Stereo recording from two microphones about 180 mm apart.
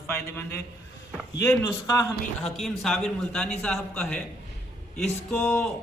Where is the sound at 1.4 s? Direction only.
15° left (ahead or behind).